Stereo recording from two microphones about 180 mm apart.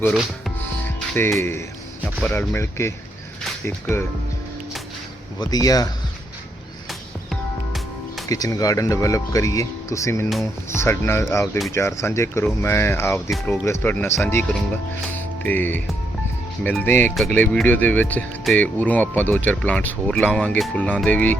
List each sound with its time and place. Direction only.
0.1 s music: centre (ahead or behind)
2.2 s speech: 10° left (ahead or behind)
5.4 s speech: 20° left (ahead or behind)
7.3 s music: centre (ahead or behind)
8.3 s speech: 20° left (ahead or behind)